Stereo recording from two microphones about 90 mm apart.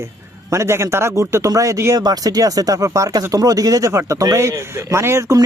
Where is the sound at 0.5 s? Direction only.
30° right (ahead or behind).